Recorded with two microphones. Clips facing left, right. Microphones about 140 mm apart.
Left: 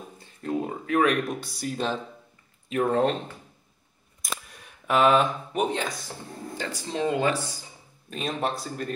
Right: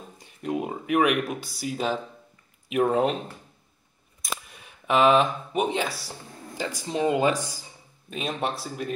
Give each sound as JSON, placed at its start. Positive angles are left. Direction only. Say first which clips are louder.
{"t": 0.2, "sound": "speech", "louder": "even", "side_deg": -15}
{"t": 1.4, "sound": "speech", "louder": "right 1 dB", "side_deg": 0}
{"t": 4.2, "sound": "speech", "louder": "right 1 dB", "side_deg": 0}
{"t": 8.1, "sound": "speech", "louder": "even", "side_deg": 0}